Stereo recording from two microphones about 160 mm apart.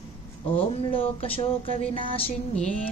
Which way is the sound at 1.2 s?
35° left (ahead or behind).